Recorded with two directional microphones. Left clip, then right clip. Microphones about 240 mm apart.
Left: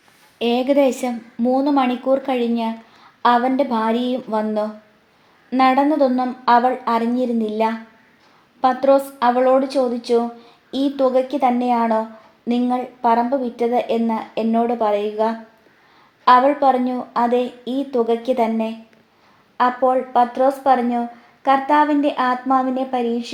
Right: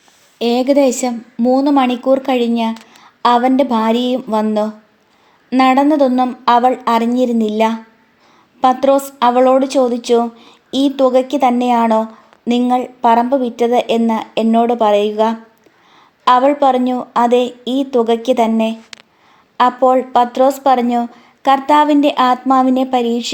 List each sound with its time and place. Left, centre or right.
0.3 s a woman's voice: right